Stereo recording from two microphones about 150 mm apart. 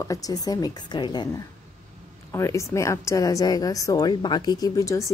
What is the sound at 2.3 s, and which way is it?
A woman's voice, 20° left (ahead or behind).